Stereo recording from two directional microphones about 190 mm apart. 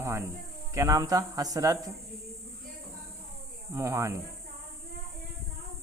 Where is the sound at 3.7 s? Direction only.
15° right (ahead or behind).